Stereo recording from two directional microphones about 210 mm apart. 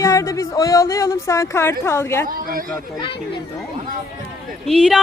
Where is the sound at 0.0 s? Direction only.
15° left (ahead or behind).